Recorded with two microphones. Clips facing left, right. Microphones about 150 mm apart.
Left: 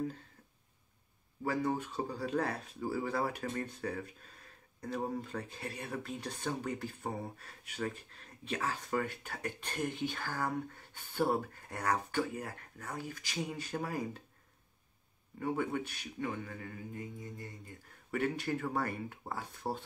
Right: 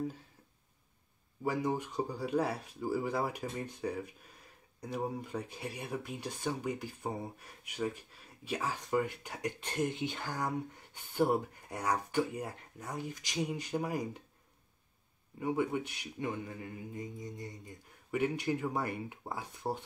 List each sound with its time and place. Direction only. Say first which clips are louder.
1.4 s speech: right 1 dB; 15° right (ahead or behind)
15.3 s speech: right 2 dB; 10° right (ahead or behind)